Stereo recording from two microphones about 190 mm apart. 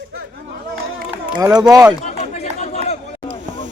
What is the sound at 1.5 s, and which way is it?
Speech, 20° right (ahead or behind).